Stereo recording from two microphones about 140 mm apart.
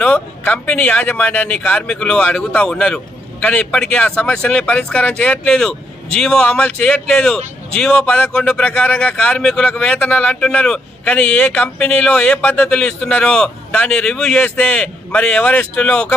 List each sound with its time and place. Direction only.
0.0 s speech: 10° left (ahead or behind)